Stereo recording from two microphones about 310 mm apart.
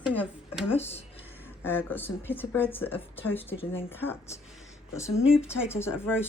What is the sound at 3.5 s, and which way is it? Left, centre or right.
Speech, centre.